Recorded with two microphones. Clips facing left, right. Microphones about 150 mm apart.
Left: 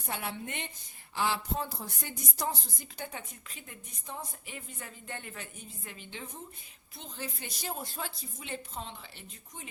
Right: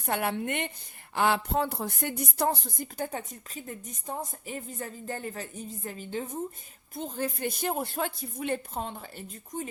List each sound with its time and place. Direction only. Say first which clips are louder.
0.0 s a woman's voice: right 8 dB; 60° right (ahead or behind)